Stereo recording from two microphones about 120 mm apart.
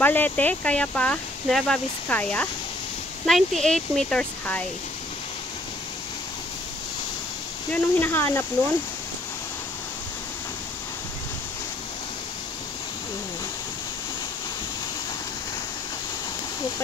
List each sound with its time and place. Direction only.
0.0 s speech: 15° left (ahead or behind)
3.3 s speech: centre (ahead or behind)
7.7 s speech: 15° left (ahead or behind)